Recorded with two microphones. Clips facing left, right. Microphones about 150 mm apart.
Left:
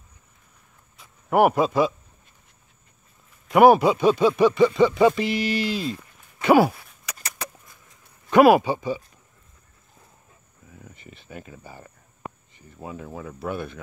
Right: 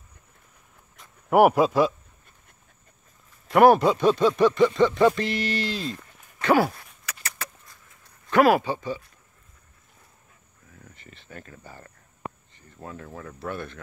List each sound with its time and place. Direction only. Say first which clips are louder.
1.3 s speech: right 1 dB; 5° right (ahead or behind)
3.4 s speech: left 2 dB; 5° left (ahead or behind)
7.2 s vehicle: left 3 dB; 20° left (ahead or behind)
8.3 s speech: left 4 dB; 15° left (ahead or behind)
10.7 s speech: left 4 dB; 10° left (ahead or behind)